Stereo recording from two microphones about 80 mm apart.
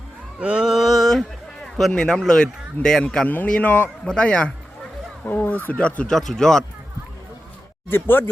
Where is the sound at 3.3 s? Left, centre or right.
Left.